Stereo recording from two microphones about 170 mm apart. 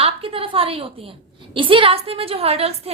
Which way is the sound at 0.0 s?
35° right (ahead or behind).